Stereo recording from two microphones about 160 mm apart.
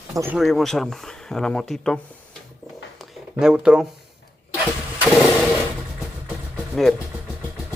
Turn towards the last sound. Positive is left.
turn(degrees=0)  # may be behind; listen again after turning